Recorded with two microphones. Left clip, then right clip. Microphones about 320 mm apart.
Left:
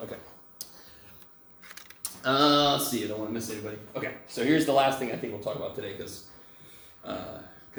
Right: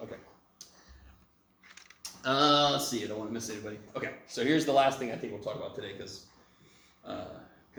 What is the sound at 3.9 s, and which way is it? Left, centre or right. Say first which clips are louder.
Speech: left 2 dB; centre.